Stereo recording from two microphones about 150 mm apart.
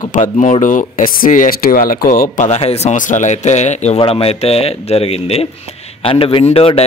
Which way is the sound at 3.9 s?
40° left (ahead or behind).